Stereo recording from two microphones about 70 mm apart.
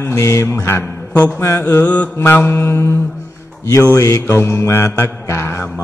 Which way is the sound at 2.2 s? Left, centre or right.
Left.